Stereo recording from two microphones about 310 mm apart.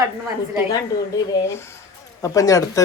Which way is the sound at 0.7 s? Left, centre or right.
Centre.